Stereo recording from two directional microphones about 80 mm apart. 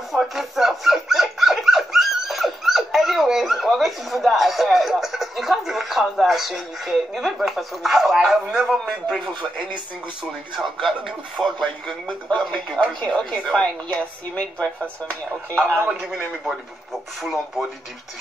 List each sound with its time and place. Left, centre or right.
0.1 s dog: centre
10.5 s speech: centre
12.8 s a woman's voice: centre
15.9 s speech: centre